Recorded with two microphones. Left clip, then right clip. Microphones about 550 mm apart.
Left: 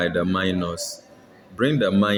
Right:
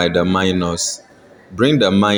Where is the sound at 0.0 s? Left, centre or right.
Left.